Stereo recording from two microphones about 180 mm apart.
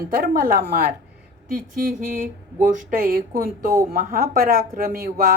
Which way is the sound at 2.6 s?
50° right (ahead or behind).